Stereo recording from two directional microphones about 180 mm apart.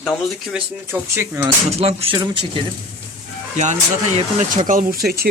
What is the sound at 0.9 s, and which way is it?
Speech, 15° right (ahead or behind).